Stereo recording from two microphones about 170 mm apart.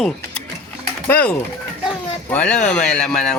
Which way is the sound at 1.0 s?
10° left (ahead or behind).